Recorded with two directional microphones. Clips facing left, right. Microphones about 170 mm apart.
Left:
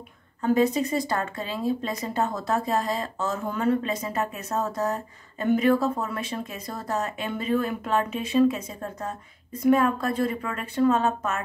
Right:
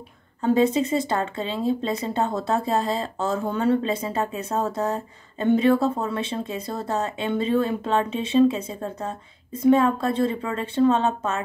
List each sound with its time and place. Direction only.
0.4 s speech: 25° right (ahead or behind)